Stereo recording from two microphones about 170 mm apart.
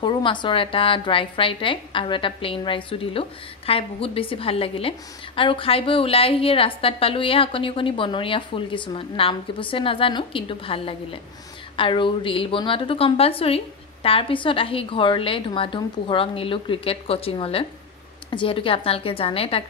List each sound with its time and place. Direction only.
0.0 s a woman's voice: 30° left (ahead or behind)